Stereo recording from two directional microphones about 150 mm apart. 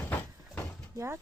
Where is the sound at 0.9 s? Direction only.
20° right (ahead or behind).